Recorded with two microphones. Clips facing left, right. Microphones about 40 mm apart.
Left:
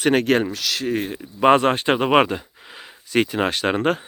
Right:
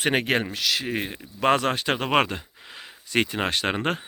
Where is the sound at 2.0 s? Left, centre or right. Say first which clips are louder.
Left 5 dB; centre.